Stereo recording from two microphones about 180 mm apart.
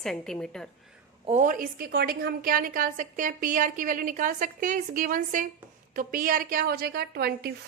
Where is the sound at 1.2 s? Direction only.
45° right (ahead or behind); by 7.5 s 60° right (ahead or behind).